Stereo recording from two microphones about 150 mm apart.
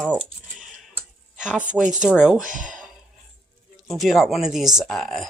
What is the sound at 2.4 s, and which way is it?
Speech, 60° right (ahead or behind).